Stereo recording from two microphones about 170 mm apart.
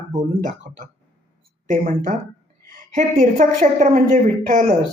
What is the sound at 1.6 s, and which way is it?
A woman's voice, 50° right (ahead or behind).